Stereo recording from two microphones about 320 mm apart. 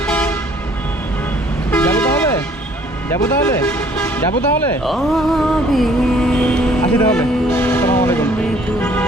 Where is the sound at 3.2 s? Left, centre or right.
Centre.